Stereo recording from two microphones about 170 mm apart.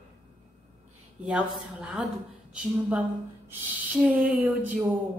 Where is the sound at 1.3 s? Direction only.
5° right (ahead or behind).